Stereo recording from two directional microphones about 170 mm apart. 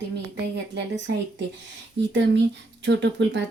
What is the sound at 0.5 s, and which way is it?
Speech, 90° right.